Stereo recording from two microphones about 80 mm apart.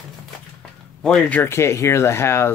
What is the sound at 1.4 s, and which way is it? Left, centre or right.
Speech, left.